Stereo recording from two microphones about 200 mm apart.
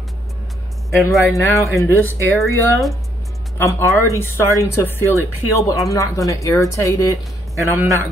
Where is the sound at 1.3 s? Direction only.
15° left (ahead or behind).